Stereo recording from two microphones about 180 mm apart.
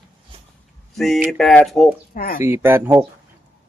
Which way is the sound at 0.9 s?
Centre (ahead or behind).